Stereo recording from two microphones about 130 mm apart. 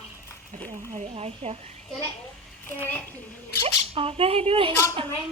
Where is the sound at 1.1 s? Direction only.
55° right (ahead or behind).